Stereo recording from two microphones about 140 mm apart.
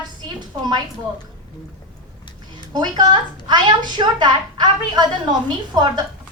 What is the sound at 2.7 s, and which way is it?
Speech, 30° right (ahead or behind).